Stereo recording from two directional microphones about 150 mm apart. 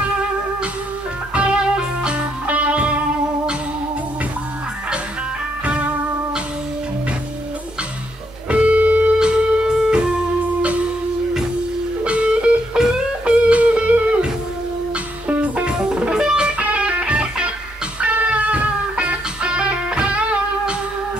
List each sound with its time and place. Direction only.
1.3 s music: 5° right (ahead or behind)
8.5 s music: 10° right (ahead or behind)
12.0 s music: 10° right (ahead or behind)